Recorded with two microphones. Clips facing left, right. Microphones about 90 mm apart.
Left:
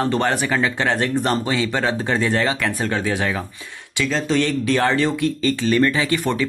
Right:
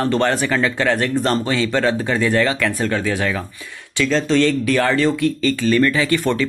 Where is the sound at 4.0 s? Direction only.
10° left (ahead or behind).